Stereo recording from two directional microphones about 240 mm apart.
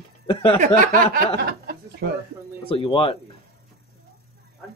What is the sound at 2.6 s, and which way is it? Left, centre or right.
Speech, left.